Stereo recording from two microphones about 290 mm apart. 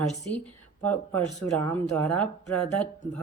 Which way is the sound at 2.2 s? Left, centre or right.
Centre.